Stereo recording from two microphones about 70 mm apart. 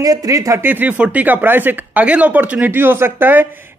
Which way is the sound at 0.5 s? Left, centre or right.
Right.